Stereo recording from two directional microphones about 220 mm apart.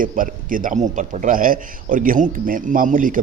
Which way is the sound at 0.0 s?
40° right (ahead or behind).